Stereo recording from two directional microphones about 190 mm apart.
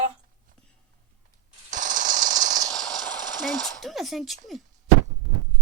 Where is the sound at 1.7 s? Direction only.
40° right (ahead or behind).